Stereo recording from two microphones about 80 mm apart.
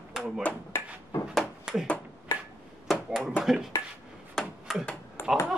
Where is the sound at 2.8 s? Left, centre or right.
Centre.